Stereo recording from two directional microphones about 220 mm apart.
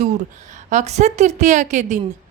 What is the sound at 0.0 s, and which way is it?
A woman's voice, 35° right (ahead or behind).